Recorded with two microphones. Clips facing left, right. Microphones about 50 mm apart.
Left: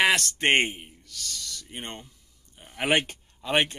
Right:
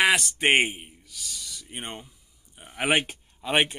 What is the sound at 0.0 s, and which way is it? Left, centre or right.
A man's voice, centre.